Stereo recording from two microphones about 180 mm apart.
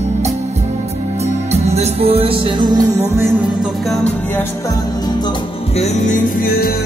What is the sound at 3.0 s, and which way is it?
Music, 10° right (ahead or behind).